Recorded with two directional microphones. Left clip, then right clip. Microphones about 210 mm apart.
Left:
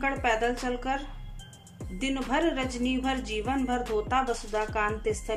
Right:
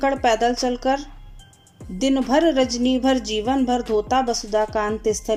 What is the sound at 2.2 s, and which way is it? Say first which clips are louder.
A woman's voice: right 9 dB; 30° right (ahead or behind).